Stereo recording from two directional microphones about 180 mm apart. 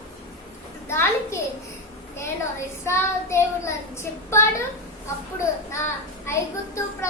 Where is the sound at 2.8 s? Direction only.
15° left (ahead or behind).